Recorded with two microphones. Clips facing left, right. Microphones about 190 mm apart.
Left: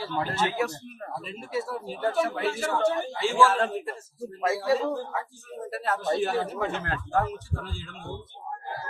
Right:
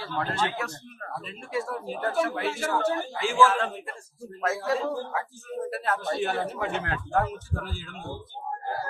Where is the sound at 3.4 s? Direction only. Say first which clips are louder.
Left 1 dB; 40° left (ahead or behind).